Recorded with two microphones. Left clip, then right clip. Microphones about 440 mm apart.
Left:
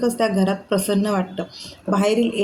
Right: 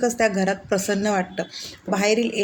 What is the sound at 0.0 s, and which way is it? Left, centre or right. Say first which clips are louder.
Speech: even; left.